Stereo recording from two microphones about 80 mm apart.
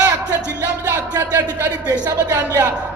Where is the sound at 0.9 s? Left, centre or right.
Right.